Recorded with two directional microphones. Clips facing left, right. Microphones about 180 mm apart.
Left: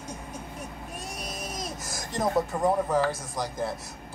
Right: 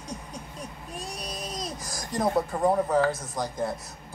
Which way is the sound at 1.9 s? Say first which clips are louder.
Right 2 dB; 25° left (ahead or behind).